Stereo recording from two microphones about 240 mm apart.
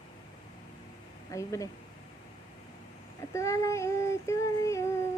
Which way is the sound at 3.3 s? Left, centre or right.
Centre.